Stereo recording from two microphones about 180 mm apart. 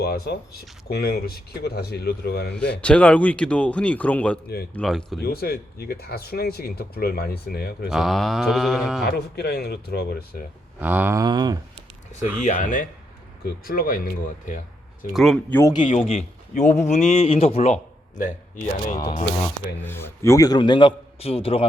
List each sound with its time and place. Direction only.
0.0 s speech: 60° left (ahead or behind)
2.8 s speech: 5° left (ahead or behind)
4.7 s a sound: 5° left (ahead or behind)
5.2 s speech: 60° left (ahead or behind)
7.9 s a sound: centre (ahead or behind)
9.0 s speech: 65° left (ahead or behind)
10.8 s speech: 10° right (ahead or behind)
12.4 s speech: 45° left (ahead or behind)
15.1 s a sound: centre (ahead or behind)
15.5 s speech: 15° left (ahead or behind)
16.1 s a man's voice: 40° left (ahead or behind)
18.9 s a man's voice: 25° left (ahead or behind)
19.8 s a man's voice: 10° left (ahead or behind); by 21.6 s 35° left (ahead or behind)